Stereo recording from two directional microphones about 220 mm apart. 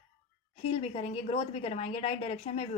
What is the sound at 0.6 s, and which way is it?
Speech, 25° left (ahead or behind).